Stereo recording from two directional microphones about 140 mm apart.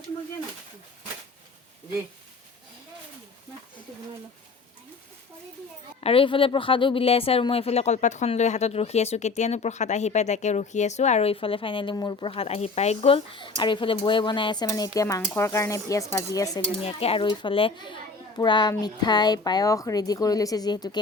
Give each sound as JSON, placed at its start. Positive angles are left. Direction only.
{"t": 6.0, "sound": "a woman's voice", "side_deg": 40}
{"t": 16.8, "sound": "a woman's voice", "side_deg": 45}